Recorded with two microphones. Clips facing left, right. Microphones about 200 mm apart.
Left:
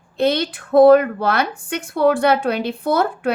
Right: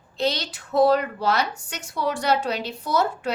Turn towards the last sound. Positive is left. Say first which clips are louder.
# left 5 dB
turn(degrees=55)  # may be behind; listen again after turning